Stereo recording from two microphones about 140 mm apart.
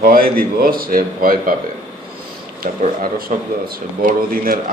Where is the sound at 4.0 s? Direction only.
90° right.